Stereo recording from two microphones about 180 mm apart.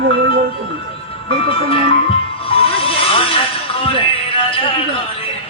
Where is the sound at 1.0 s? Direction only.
30° left (ahead or behind).